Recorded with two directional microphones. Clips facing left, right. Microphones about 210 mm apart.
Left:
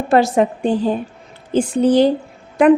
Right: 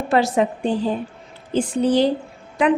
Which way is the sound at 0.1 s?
45° left (ahead or behind).